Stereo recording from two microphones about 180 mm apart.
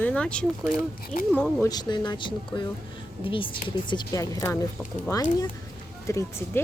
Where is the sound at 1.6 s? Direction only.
20° left (ahead or behind).